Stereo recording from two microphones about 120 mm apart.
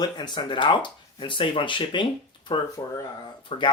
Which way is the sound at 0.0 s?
40° left (ahead or behind).